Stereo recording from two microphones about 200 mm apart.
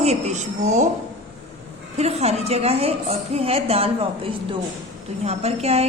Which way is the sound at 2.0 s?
30° right (ahead or behind).